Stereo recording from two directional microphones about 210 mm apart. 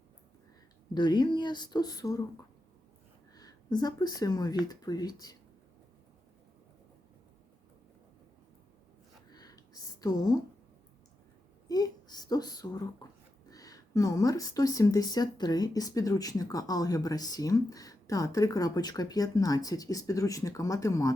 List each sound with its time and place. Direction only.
0.9 s speech: 20° left (ahead or behind)
3.3 s speech: 20° left (ahead or behind)
9.3 s a sound: 20° left (ahead or behind)
10.0 s speech: 20° left (ahead or behind)
11.7 s speech: 20° left (ahead or behind)